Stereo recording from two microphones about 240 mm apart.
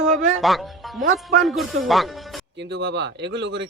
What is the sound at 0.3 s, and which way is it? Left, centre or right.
Speech, centre.